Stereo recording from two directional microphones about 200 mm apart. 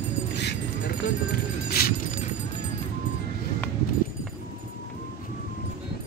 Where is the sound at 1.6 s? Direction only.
50° left (ahead or behind).